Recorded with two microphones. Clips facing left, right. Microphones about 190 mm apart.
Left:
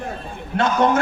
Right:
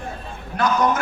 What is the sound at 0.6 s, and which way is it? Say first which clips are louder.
Speech: left 2 dB; 25° left (ahead or behind).